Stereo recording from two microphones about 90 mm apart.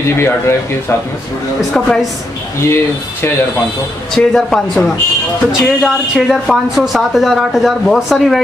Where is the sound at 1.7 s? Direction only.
5° left (ahead or behind).